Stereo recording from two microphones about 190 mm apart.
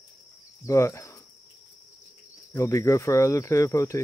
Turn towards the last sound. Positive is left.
turn(degrees=15)  # may be behind; listen again after turning